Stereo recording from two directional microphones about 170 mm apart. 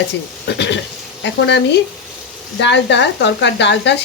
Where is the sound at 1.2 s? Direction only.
90° left.